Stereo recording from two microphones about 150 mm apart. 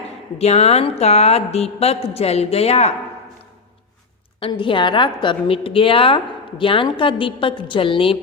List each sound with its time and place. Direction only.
0.3 s a woman's voice: 45° left (ahead or behind)
4.4 s a woman's voice: 35° left (ahead or behind)